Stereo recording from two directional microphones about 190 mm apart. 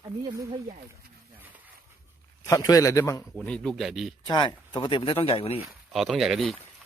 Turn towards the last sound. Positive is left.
turn(degrees=0)  # may be behind; listen again after turning